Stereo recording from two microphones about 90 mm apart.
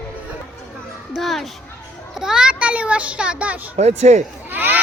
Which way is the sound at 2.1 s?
5° right (ahead or behind).